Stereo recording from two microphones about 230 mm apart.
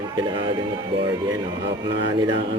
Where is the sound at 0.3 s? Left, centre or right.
Right.